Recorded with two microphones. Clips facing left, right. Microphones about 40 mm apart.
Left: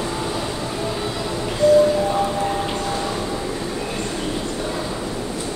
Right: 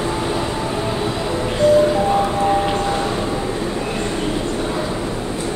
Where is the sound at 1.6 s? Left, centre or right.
Right.